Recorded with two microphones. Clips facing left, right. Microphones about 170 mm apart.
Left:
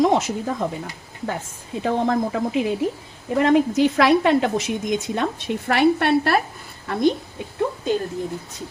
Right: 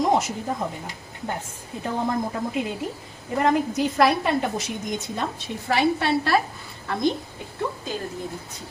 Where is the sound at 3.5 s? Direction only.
90° left; by 6.4 s 60° left (ahead or behind).